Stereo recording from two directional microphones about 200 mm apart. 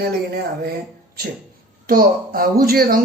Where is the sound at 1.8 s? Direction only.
45° right (ahead or behind).